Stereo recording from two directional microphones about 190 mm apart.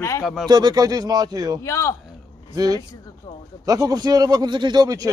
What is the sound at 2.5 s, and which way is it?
Speech, 20° right (ahead or behind).